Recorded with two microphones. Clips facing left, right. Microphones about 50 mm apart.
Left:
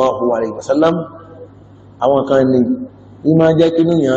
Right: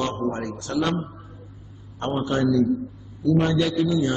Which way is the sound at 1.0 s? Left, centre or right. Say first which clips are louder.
Left 9 dB; left.